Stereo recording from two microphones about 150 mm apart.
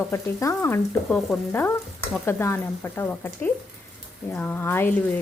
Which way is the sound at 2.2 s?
15° left (ahead or behind).